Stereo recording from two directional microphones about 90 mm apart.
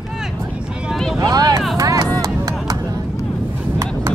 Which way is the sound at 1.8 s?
40° right (ahead or behind).